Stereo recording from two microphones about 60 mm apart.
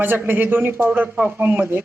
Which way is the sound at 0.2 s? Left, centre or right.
Right.